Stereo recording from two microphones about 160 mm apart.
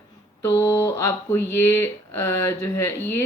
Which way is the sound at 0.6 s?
15° left (ahead or behind).